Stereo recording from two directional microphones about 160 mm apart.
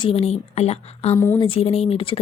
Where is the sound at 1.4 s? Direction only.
35° left (ahead or behind).